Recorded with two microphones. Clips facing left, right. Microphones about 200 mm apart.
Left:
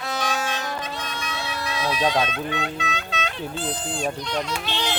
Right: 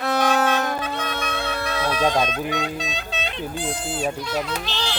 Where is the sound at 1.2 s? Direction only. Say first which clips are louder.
Right 4 dB; 55° right (ahead or behind).